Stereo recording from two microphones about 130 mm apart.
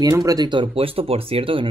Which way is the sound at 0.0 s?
30° right (ahead or behind).